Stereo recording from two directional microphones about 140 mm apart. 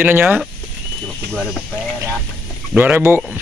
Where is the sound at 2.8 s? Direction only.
15° right (ahead or behind).